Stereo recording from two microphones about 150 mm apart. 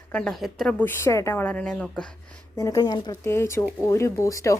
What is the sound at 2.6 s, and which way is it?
Speech, 25° left (ahead or behind).